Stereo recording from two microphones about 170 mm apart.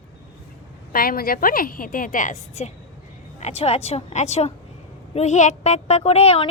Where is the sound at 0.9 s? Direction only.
60° left (ahead or behind).